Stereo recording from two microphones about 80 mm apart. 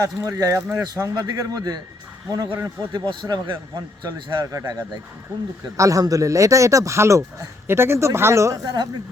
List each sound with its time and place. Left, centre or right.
0.0 s speech: right
1.1 s a man's voice: right
2.9 s a man's voice: right
8.6 s a man's voice: right